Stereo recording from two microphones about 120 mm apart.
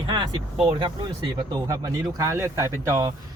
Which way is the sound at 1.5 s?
30° right (ahead or behind).